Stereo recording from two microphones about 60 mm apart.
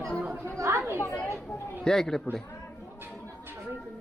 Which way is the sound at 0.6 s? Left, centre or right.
Right.